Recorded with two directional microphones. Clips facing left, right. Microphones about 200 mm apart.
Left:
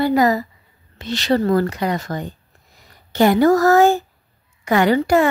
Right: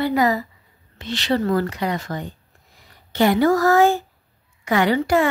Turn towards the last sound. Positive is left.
turn(degrees=45)  # may be behind; listen again after turning